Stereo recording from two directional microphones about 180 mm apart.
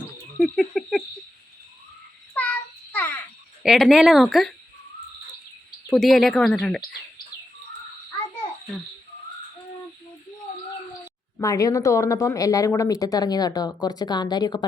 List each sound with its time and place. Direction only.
0.3 s a sound: centre (ahead or behind)
2.3 s child singing: 10° left (ahead or behind)
3.6 s speech: centre (ahead or behind)
5.9 s speech: centre (ahead or behind)
11.3 s speech: 20° left (ahead or behind)